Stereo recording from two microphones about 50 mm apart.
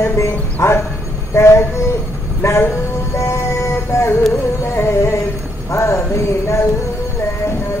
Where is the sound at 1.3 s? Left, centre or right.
Left.